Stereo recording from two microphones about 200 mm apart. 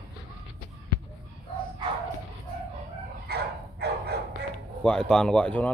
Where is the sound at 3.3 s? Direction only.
55° right (ahead or behind).